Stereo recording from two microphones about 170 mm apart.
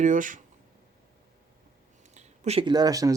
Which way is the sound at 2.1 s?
40° right (ahead or behind).